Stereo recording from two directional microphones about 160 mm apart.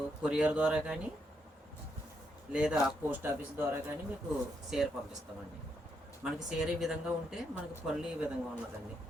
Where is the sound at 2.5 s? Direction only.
5° right (ahead or behind).